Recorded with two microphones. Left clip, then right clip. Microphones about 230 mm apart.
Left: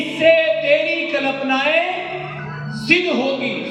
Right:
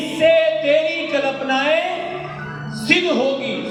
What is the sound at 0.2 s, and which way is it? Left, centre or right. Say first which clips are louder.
Music: left 1 dB; right.